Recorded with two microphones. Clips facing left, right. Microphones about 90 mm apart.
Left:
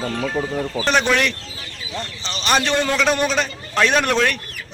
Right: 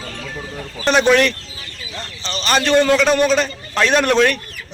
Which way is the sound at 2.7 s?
Centre (ahead or behind).